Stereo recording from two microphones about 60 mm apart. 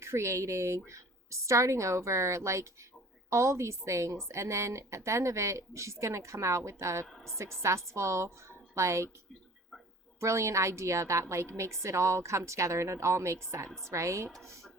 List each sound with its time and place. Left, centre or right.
0.0 s a woman's voice: right
10.2 s a woman's voice: right